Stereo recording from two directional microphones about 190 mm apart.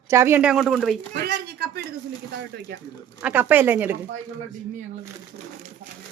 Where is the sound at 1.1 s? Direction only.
60° right (ahead or behind).